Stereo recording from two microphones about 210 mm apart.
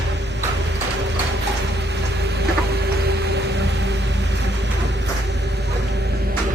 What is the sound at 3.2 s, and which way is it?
Music, 55° right (ahead or behind).